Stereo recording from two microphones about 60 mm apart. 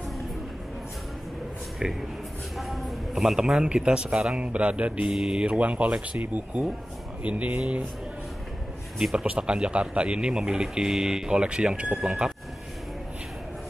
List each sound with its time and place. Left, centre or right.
1.8 s speech: centre
5.1 s speech: centre
9.1 s speech: centre